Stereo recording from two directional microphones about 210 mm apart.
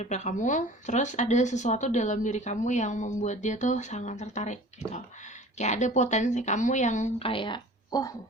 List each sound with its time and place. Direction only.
0.0 s speech: 35° left (ahead or behind); by 8.1 s 20° left (ahead or behind)